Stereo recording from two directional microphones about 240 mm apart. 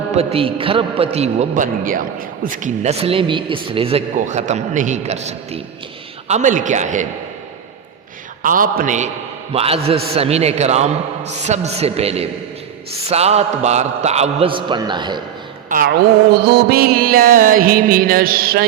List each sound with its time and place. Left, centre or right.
0.1 s a man's voice: right
6.2 s music: right
8.4 s music: right
9.5 s a man's voice: right
16.3 s music: right